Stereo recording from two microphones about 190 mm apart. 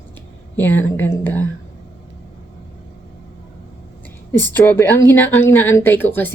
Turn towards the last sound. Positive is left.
turn(degrees=10)  # may be behind; listen again after turning